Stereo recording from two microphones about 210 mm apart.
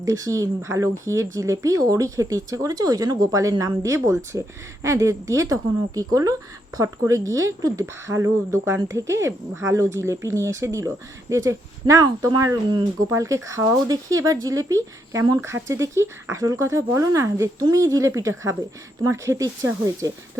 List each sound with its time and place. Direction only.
0.0 s speech: 15° right (ahead or behind)